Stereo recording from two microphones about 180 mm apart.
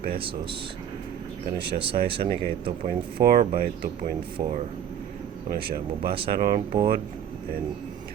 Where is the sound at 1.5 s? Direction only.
65° right (ahead or behind).